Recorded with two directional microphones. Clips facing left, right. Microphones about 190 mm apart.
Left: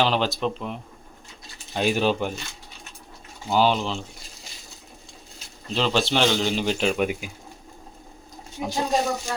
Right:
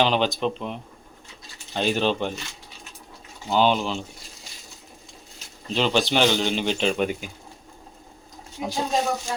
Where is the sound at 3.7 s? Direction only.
5° right (ahead or behind).